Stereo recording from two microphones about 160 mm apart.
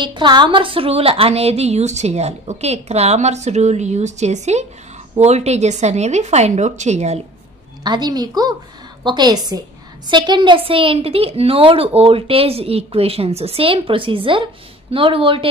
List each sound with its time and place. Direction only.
0.0 s speech: 30° right (ahead or behind); by 7.2 s 45° right (ahead or behind)
7.8 s a woman's voice: 25° right (ahead or behind)